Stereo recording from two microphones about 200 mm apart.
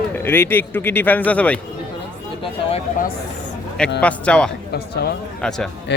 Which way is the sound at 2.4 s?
30° left (ahead or behind).